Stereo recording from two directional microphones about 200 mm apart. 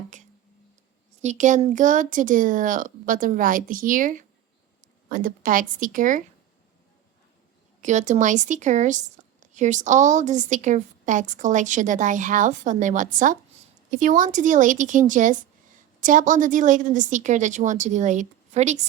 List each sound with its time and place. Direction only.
1.2 s a woman's voice: 35° right (ahead or behind)
7.8 s a woman's voice: 40° right (ahead or behind)